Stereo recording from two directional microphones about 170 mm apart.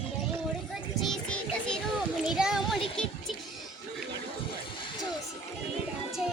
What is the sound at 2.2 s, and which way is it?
Child singing, 5° right (ahead or behind).